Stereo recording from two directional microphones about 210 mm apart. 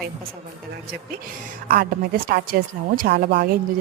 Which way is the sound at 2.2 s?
45° right (ahead or behind).